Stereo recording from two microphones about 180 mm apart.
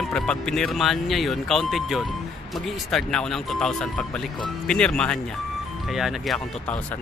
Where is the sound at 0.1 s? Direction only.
5° left (ahead or behind).